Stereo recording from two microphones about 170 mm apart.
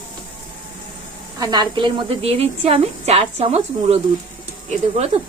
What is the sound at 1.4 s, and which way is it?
A woman's voice, 25° right (ahead or behind).